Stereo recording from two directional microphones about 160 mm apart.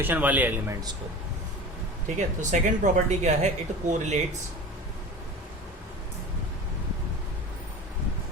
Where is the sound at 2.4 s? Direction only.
50° right (ahead or behind).